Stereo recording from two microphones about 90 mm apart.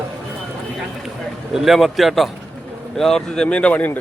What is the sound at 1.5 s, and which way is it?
A man's voice, centre (ahead or behind).